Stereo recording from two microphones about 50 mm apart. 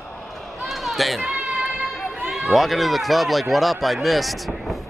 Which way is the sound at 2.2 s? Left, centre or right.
Centre.